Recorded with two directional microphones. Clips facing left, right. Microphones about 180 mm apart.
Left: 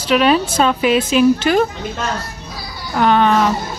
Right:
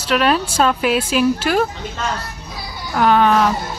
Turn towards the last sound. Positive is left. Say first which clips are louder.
# even
turn(degrees=-5)  # may be behind; listen again after turning